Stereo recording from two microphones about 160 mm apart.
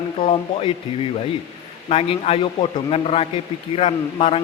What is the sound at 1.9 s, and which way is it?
A man's voice, 40° left (ahead or behind).